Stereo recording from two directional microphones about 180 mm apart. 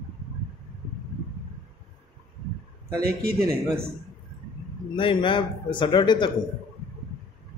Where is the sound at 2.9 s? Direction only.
60° right (ahead or behind).